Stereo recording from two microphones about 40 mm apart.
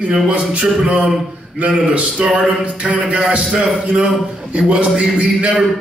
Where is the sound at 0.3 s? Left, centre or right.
Right.